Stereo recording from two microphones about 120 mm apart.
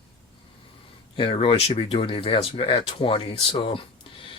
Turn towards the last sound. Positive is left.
turn(degrees=45)  # may be behind; listen again after turning